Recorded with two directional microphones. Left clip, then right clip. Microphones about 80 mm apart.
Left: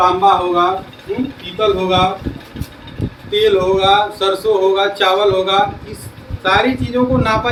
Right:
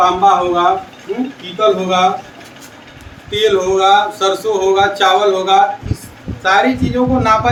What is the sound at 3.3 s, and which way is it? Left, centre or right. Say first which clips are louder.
Speech: even; right.